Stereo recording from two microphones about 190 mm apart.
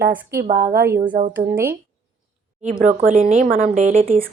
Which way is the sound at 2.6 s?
40° right (ahead or behind).